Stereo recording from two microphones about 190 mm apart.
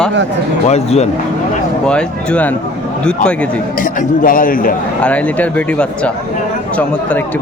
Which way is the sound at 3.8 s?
45° left (ahead or behind).